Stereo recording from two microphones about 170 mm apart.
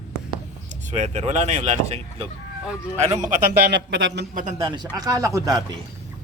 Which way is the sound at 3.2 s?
45° right (ahead or behind).